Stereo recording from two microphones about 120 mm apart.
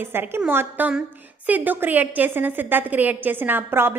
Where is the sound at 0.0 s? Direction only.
20° right (ahead or behind).